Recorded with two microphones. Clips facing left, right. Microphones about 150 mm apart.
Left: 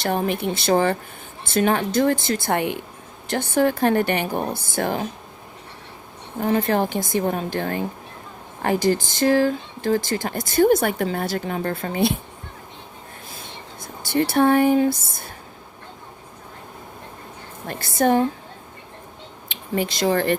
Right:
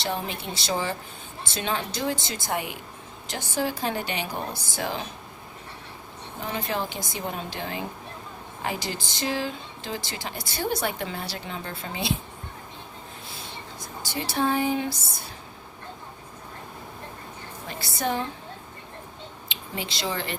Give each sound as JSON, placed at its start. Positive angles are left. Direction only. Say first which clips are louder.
{"t": 0.0, "sound": "speech", "louder": "left 8 dB", "side_deg": 50}
{"t": 6.4, "sound": "speech", "louder": "left 10 dB", "side_deg": 50}
{"t": 14.0, "sound": "speech", "louder": "left 9 dB", "side_deg": 55}
{"t": 17.7, "sound": "speech", "louder": "left 9 dB", "side_deg": 50}
{"t": 19.5, "sound": "speech", "louder": "left 11 dB", "side_deg": 50}